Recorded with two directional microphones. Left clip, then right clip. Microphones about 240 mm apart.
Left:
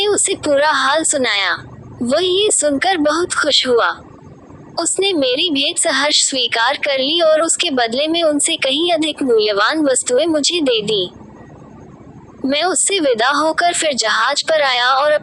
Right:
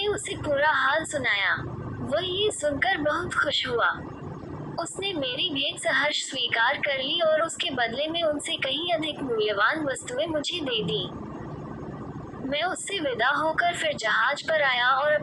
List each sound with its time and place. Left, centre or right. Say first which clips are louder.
0.0 s a woman's voice: left 12 dB; left
12.5 s a woman's voice: left 12 dB; left